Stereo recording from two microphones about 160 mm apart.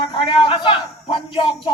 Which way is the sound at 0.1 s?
30° left (ahead or behind).